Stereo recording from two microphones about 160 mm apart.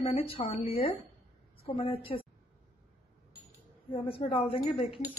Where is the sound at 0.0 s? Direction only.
35° left (ahead or behind).